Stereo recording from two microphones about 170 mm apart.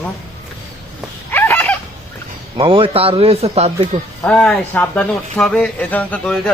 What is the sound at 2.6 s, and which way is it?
Speech, 30° right (ahead or behind).